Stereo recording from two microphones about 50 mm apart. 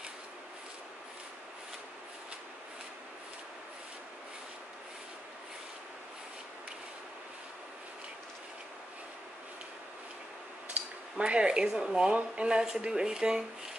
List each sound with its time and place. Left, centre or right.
11.1 s speech: right